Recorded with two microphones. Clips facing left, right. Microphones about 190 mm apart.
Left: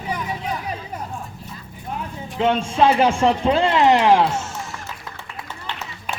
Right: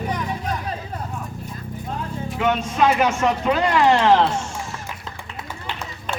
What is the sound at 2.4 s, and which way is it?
Speech, 30° left (ahead or behind).